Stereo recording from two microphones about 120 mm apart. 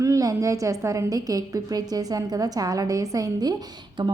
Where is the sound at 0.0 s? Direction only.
30° right (ahead or behind).